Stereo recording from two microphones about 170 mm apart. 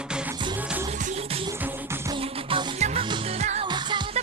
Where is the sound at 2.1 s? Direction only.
30° right (ahead or behind).